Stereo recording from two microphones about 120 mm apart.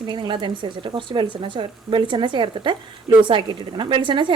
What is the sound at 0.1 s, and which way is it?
A woman's voice, 40° right (ahead or behind).